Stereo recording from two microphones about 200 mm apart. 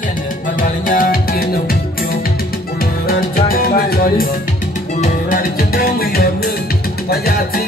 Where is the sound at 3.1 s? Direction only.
50° left (ahead or behind).